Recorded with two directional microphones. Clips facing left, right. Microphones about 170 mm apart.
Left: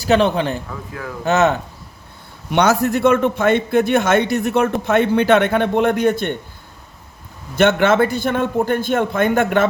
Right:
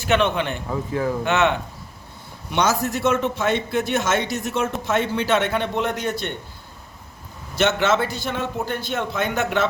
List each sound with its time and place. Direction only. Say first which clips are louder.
0.0 s a man's voice: left 5 dB; 35° left (ahead or behind)
0.7 s speech: right 7 dB; 30° right (ahead or behind)
1.2 s a man's voice: left 7 dB; 40° left (ahead or behind)
2.5 s a man's voice: left 6 dB; 60° left (ahead or behind)
7.5 s a man's voice: left 5 dB; 55° left (ahead or behind)